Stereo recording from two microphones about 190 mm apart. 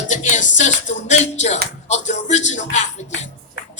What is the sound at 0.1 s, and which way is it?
Music, 40° left (ahead or behind).